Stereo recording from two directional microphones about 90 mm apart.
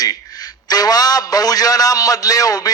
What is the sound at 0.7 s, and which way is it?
A man's voice, 45° left (ahead or behind).